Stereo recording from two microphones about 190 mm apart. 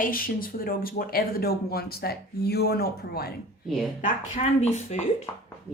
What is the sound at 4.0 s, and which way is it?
Speech, 40° left (ahead or behind).